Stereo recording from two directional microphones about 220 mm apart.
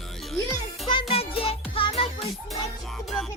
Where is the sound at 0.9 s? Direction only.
25° left (ahead or behind).